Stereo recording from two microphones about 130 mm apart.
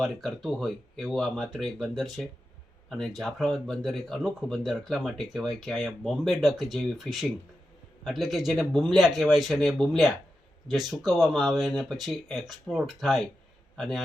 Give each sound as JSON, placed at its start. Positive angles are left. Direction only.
{"t": 0.0, "sound": "a man's voice", "side_deg": 0}